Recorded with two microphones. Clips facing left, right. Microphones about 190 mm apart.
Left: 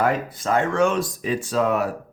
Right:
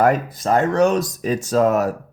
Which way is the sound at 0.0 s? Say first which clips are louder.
Right 5 dB; 40° right (ahead or behind).